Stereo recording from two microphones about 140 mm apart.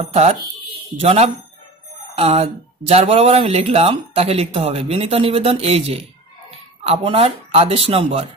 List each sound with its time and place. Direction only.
0.1 s speech: 55° right (ahead or behind)